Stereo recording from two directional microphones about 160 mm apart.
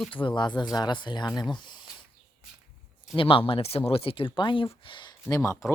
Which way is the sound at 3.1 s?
35° left (ahead or behind).